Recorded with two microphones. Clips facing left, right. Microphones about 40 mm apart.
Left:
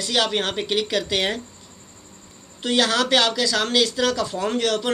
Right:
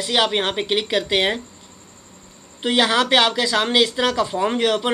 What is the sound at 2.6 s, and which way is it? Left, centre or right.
Speech, right.